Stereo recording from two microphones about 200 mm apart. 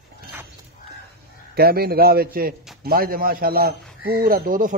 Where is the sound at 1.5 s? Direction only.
50° right (ahead or behind).